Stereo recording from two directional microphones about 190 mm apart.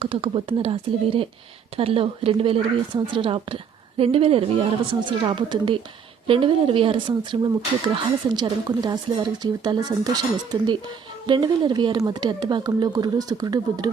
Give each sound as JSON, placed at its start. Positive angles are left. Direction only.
{"t": 0.0, "sound": "speech", "side_deg": -30}